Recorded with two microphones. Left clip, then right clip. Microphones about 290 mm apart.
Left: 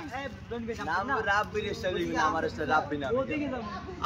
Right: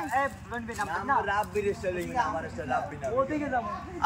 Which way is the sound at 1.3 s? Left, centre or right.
Centre.